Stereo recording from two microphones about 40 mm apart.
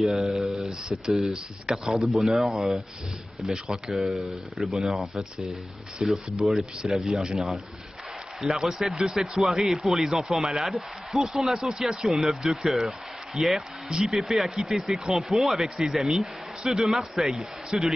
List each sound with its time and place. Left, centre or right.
0.1 s a sound: centre
1.3 s a man's voice: centre
2.0 s a man's voice: centre
4.1 s a man's voice: centre
16.6 s a man's voice: centre